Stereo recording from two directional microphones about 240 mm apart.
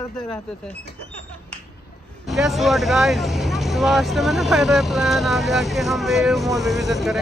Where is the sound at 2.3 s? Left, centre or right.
Centre.